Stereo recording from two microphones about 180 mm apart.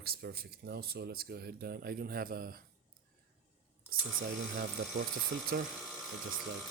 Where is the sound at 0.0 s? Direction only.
60° right (ahead or behind).